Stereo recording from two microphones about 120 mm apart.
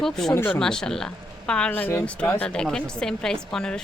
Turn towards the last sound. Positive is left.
turn(degrees=5)  # may be behind; listen again after turning